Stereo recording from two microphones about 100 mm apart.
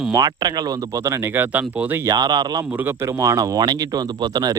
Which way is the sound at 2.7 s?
25° right (ahead or behind).